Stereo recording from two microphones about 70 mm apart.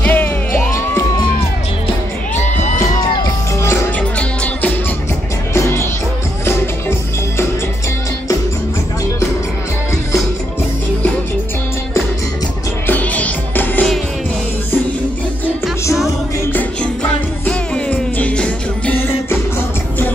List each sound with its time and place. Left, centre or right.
0.0 s music: left
0.5 s music: left
3.0 s music: left
3.6 s music: left
4.2 s music: left
5.5 s music: left
12.8 s music: left
16.5 s music: centre